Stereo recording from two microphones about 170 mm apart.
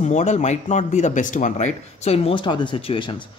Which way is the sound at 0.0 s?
45° left (ahead or behind).